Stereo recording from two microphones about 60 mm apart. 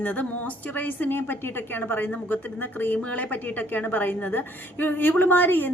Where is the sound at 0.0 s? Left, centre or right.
Left.